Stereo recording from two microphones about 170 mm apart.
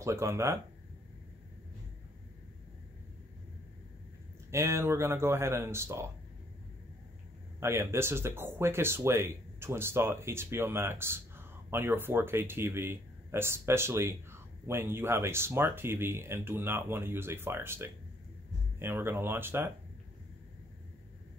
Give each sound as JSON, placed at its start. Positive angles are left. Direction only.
{"t": 0.0, "sound": "speech", "side_deg": -15}
{"t": 4.5, "sound": "speech", "side_deg": -15}
{"t": 7.6, "sound": "speech", "side_deg": -15}